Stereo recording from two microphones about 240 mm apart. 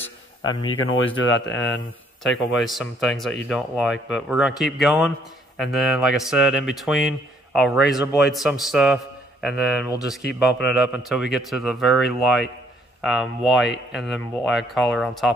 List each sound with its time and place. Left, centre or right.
0.7 s speech: left
2.3 s speech: centre